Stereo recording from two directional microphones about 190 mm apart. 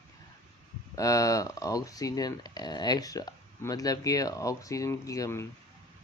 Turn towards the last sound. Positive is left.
turn(degrees=15)  # may be behind; listen again after turning